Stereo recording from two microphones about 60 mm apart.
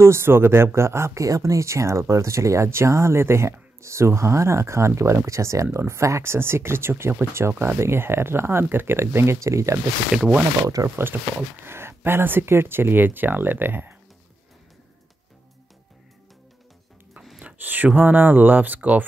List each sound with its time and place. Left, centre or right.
0.0 s speech: right
10.1 s speech: centre
10.8 s speech: right
11.1 s speech: right
11.6 s speech: right
17.6 s speech: right